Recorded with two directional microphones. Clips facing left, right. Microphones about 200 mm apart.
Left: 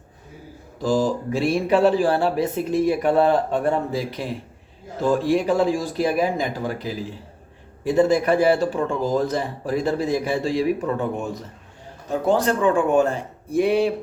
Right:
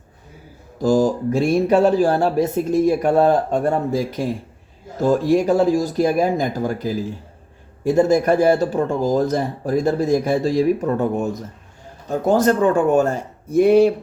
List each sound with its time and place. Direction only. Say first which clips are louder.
0.8 s speech: right 4 dB; 45° right (ahead or behind)